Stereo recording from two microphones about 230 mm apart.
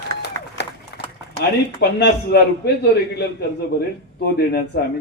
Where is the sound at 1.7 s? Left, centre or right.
Left.